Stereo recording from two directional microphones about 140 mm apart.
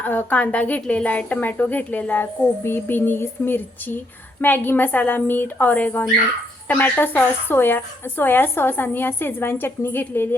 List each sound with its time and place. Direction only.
0.0 s a woman's voice: 15° left (ahead or behind)